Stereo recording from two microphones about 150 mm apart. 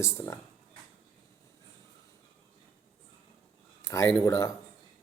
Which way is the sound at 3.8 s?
20° left (ahead or behind).